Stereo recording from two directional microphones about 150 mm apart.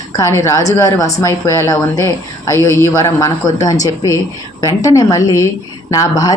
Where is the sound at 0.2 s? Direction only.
20° left (ahead or behind).